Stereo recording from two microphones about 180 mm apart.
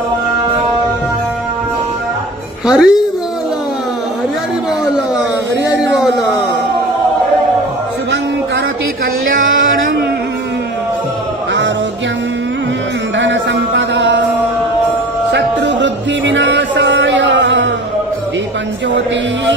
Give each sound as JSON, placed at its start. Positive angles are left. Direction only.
{"t": 2.6, "sound": "a woman's voice", "side_deg": -5}
{"t": 13.2, "sound": "music", "side_deg": -90}
{"t": 15.3, "sound": "music", "side_deg": -85}